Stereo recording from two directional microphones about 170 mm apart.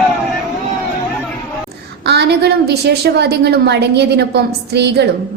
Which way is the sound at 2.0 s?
80° right.